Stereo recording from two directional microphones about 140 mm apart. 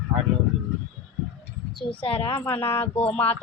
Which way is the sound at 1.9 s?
40° left (ahead or behind).